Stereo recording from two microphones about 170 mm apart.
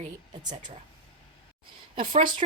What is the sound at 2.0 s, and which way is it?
Speech, 30° right (ahead or behind).